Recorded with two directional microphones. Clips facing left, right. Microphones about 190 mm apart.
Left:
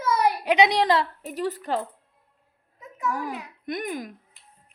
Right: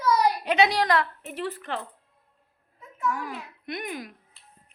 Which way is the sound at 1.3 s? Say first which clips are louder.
Left 7 dB; 40° left (ahead or behind).